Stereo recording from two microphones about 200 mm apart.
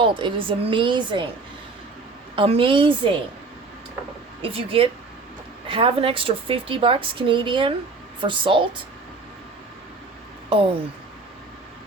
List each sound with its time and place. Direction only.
0.0 s a woman's voice: 25° right (ahead or behind)
2.3 s a woman's voice: 25° right (ahead or behind)
4.4 s a woman's voice: 30° right (ahead or behind)